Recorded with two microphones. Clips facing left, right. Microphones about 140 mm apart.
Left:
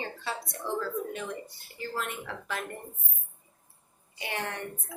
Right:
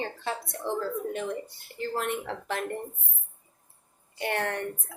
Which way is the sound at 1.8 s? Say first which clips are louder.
Right 5 dB; 60° right (ahead or behind).